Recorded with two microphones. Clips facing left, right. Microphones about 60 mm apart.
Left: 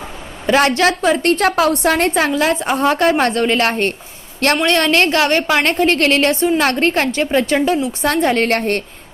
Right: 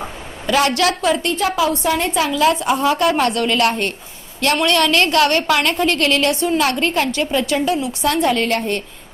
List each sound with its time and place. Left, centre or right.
0.4 s a woman's voice: left
1.2 s a woman's voice: left
2.1 s a woman's voice: left